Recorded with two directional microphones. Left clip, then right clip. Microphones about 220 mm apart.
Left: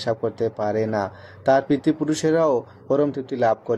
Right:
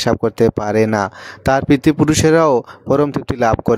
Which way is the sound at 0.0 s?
50° right (ahead or behind).